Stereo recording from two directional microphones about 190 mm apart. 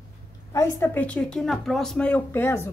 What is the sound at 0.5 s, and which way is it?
A woman's voice, 15° left (ahead or behind).